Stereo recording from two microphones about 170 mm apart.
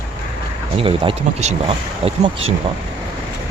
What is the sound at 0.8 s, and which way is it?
Speech, 30° right (ahead or behind).